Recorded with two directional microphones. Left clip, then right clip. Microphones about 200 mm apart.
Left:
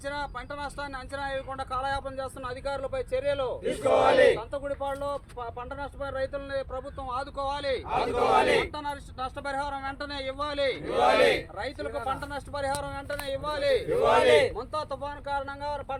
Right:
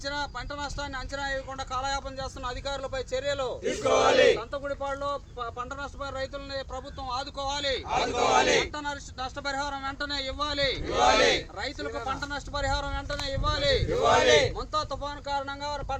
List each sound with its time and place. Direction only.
0.0 s speech: centre (ahead or behind)
1.4 s speech: 25° right (ahead or behind); by 4.3 s 40° right (ahead or behind)
4.3 s speech: 55° right (ahead or behind); by 8.4 s 20° right (ahead or behind)
8.4 s speech: 10° right (ahead or behind); by 16.0 s 5° left (ahead or behind)